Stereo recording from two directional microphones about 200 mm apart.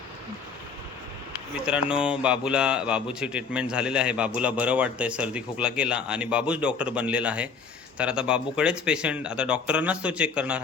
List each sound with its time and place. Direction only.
1.6 s speech: 5° right (ahead or behind)